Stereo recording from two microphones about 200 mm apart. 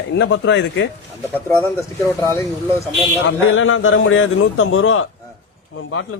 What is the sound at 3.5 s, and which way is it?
A man's voice, 80° left.